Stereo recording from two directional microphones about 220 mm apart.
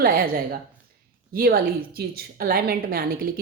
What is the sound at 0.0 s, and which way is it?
A woman's voice, 40° right (ahead or behind).